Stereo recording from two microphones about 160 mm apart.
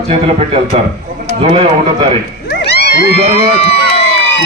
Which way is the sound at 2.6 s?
90° left.